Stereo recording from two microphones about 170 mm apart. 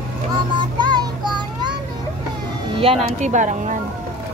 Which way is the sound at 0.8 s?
25° right (ahead or behind).